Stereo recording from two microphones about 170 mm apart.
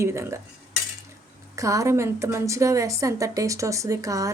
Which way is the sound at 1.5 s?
20° right (ahead or behind).